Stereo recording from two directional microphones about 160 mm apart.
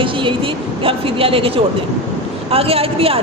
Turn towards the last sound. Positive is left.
turn(degrees=-35)  # may be behind; listen again after turning